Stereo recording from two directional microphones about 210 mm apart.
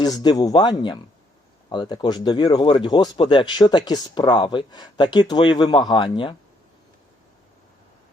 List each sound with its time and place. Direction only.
0.0 s speech: 20° left (ahead or behind)